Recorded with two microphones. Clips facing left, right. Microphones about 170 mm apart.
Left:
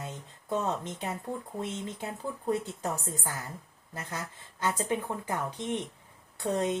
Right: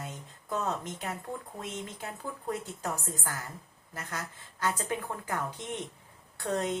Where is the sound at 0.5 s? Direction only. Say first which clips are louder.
Left 2 dB; 25° left (ahead or behind).